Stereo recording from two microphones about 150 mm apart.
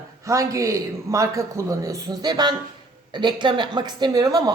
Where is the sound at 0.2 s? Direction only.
20° right (ahead or behind).